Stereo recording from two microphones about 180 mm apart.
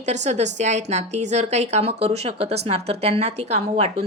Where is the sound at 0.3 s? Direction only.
40° right (ahead or behind).